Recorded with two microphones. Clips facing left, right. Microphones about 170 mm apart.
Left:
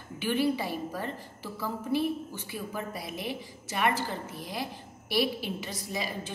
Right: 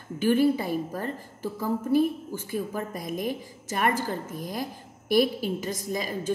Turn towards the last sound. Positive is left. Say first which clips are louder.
# right 4 dB
turn(degrees=-45)  # may be behind; listen again after turning